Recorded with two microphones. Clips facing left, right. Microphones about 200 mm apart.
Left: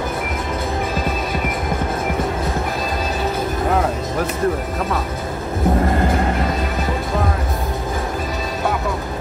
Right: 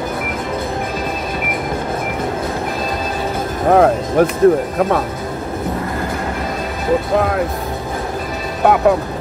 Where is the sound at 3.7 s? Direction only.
60° right (ahead or behind).